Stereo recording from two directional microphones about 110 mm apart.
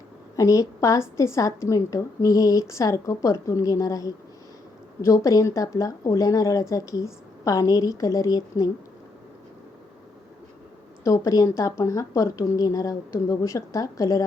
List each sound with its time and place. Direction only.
0.3 s a woman's voice: 30° left (ahead or behind)
11.0 s speech: 30° left (ahead or behind)